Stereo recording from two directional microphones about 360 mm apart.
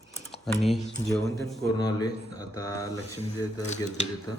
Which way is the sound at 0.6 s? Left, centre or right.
Centre.